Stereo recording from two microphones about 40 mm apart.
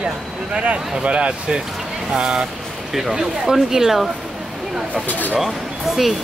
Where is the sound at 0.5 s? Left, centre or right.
Right.